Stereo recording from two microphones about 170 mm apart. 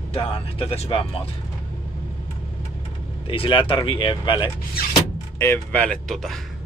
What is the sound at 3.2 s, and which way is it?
Speech, 30° left (ahead or behind).